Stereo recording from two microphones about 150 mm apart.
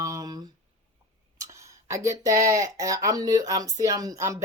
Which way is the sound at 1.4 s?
20° right (ahead or behind).